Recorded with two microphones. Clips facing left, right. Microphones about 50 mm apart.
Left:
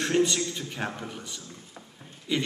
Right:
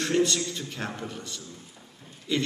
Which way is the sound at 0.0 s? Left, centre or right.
Centre.